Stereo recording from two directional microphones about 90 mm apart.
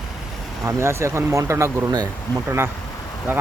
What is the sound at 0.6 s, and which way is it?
Speech, 30° right (ahead or behind).